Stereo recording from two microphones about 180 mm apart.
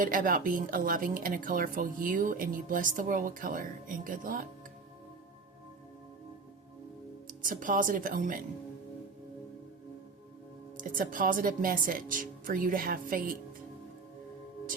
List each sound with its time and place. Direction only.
0.0 s a woman's voice: 50° right (ahead or behind)
7.3 s a woman's voice: 50° right (ahead or behind)
10.8 s a woman's voice: 50° right (ahead or behind)